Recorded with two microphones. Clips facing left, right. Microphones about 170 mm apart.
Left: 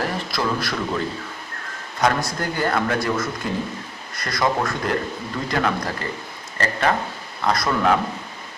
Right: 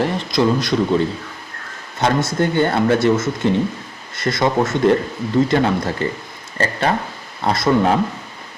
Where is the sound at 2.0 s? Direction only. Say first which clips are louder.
Right 4 dB; 25° right (ahead or behind).